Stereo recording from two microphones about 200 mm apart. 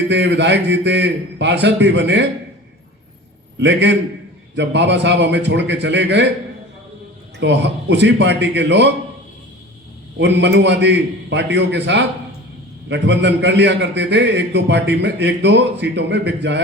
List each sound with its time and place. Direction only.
0.1 s a man's voice: 60° right (ahead or behind)
3.6 s a man's voice: 60° right (ahead or behind)
7.3 s a man's voice: 60° right (ahead or behind)
10.2 s a man's voice: 60° right (ahead or behind)